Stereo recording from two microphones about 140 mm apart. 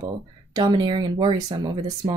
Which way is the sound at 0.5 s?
30° right (ahead or behind).